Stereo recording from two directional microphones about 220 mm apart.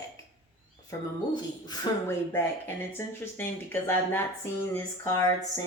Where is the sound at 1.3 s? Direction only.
15° left (ahead or behind).